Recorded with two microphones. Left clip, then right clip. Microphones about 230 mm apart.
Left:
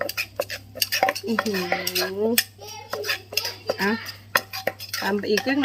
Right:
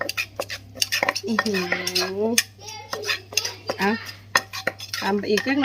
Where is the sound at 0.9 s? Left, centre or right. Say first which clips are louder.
Left 1 dB; centre.